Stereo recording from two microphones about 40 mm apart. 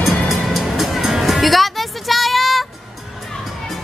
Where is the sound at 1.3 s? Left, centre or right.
Centre.